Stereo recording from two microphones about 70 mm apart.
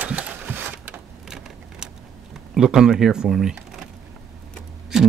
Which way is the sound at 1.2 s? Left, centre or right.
Centre.